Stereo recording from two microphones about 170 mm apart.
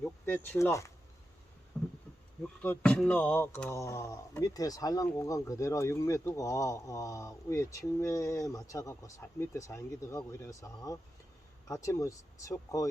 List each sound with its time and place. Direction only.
0.3 s speech: 10° left (ahead or behind)
1.7 s heart sounds: 5° left (ahead or behind)
2.4 s speech: 10° left (ahead or behind)